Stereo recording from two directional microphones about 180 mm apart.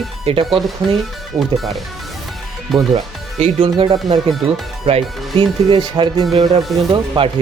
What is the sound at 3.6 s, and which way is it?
Speech, 30° right (ahead or behind).